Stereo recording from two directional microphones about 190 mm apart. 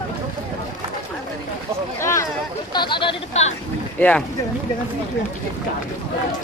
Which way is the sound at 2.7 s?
25° left (ahead or behind).